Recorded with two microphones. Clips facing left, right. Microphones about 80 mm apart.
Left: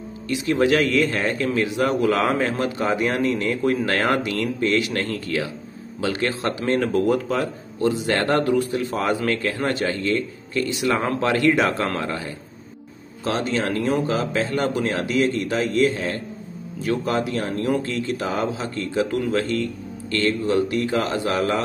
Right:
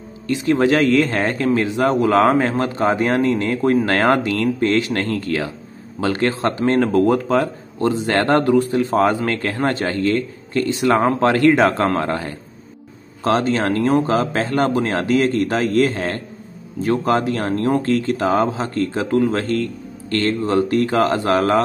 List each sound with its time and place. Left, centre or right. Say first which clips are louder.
0.3 s speech: right 3 dB; right